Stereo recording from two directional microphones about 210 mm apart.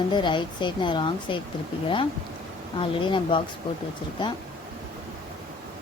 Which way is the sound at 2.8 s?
25° left (ahead or behind).